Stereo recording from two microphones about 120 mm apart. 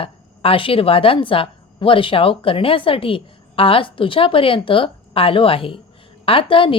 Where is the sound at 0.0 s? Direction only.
50° left (ahead or behind).